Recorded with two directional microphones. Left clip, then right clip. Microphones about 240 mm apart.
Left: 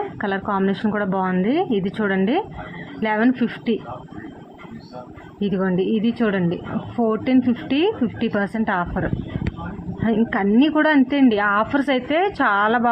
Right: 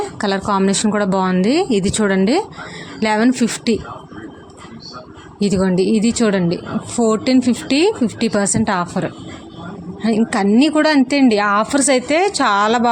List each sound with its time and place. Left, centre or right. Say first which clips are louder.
0.2 s speech: right 5 dB; right
5.5 s a woman's voice: right 5 dB; right